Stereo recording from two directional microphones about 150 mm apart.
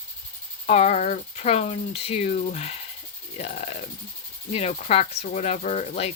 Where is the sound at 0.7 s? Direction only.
50° left (ahead or behind).